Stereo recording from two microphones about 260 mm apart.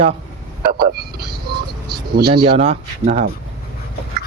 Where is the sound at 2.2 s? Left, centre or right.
Right.